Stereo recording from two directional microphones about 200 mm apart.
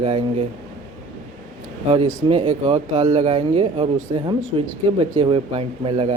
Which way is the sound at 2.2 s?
30° right (ahead or behind).